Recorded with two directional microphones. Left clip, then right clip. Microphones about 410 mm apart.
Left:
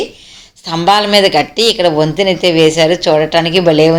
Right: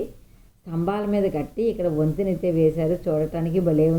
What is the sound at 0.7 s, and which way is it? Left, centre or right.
A woman's voice, left.